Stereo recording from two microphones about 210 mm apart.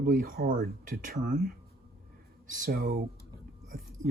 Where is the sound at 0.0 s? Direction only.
45° right (ahead or behind).